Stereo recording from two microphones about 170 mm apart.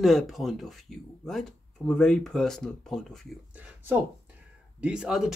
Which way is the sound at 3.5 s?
10° right (ahead or behind).